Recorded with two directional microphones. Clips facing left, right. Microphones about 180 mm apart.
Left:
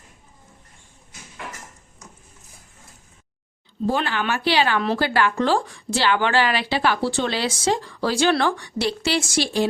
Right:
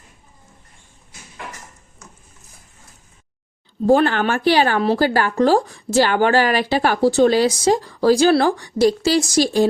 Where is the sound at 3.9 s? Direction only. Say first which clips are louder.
Right 8 dB; 50° right (ahead or behind).